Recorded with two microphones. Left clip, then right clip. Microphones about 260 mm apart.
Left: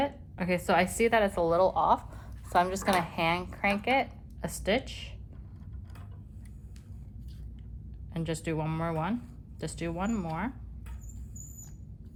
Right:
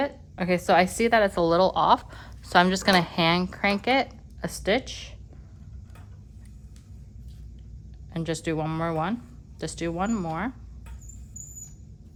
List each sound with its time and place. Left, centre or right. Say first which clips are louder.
0.0 s a woman's voice: right 3 dB; right
8.1 s a woman's voice: right 5 dB; right